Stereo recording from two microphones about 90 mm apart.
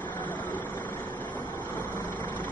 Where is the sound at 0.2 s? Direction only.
55° left (ahead or behind).